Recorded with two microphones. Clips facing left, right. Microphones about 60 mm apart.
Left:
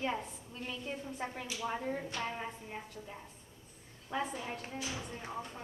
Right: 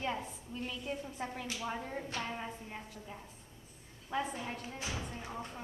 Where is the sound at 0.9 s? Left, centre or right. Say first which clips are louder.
Left 1 dB; centre.